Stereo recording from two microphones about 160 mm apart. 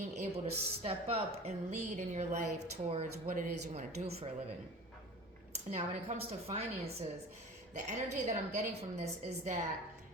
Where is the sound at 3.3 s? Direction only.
55° right (ahead or behind).